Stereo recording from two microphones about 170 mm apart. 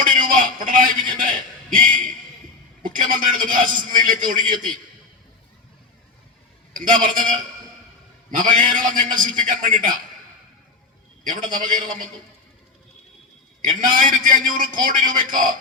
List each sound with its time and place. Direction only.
0.0 s a man's voice: 50° right (ahead or behind)
6.7 s a man's voice: 50° right (ahead or behind)
11.2 s a man's voice: 50° right (ahead or behind)
13.6 s a man's voice: 50° right (ahead or behind)